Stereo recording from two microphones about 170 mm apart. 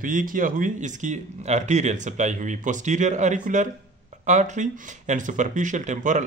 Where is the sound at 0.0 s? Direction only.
50° right (ahead or behind).